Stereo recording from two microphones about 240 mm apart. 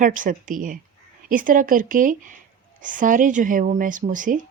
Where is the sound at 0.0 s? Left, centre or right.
Right.